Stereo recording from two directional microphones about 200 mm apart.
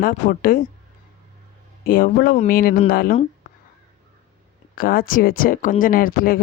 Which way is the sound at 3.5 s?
40° left (ahead or behind).